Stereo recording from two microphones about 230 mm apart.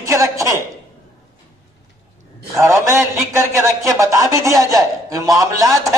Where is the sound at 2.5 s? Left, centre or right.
Centre.